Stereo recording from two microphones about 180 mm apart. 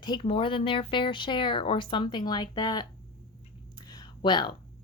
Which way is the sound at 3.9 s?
25° left (ahead or behind).